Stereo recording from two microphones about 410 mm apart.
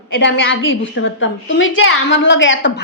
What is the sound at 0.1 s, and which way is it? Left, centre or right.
A woman's voice, left.